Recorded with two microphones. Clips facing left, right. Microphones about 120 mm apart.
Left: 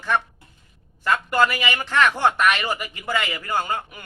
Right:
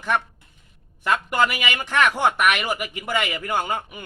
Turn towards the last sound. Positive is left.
turn(degrees=-15)  # may be behind; listen again after turning